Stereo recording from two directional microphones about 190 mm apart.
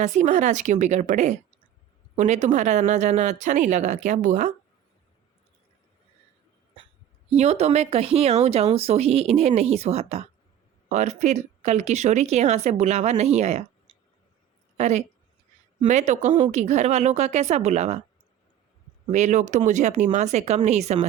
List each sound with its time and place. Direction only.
0.0 s speech: 40° right (ahead or behind)
7.3 s speech: 35° right (ahead or behind)
14.8 s speech: 35° right (ahead or behind)
19.1 s speech: 40° right (ahead or behind)